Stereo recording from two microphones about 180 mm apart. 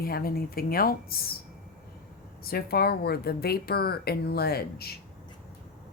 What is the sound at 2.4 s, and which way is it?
A woman's voice, 60° left (ahead or behind).